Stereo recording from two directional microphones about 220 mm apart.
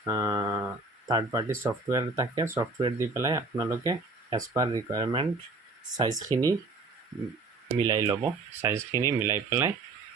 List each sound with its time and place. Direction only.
0.0 s speech: 15° right (ahead or behind)
7.7 s speech: 15° right (ahead or behind)